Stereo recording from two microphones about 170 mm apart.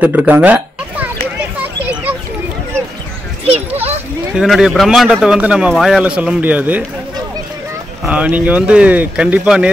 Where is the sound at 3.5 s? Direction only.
35° right (ahead or behind).